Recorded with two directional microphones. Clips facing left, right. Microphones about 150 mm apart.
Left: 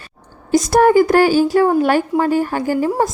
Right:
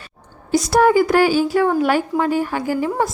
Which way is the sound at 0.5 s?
45° left (ahead or behind).